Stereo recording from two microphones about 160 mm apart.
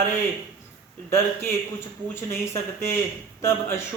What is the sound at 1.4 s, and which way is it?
Speech, 15° left (ahead or behind).